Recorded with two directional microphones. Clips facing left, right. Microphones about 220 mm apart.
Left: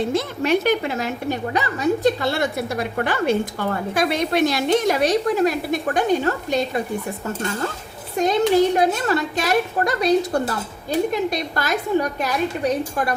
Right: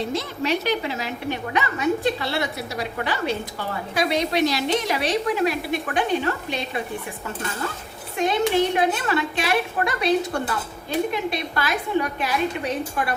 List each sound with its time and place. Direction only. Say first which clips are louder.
0.1 s a woman's voice: left 5 dB; 50° left (ahead or behind)
8.1 s a woman's voice: left 4 dB; 40° left (ahead or behind)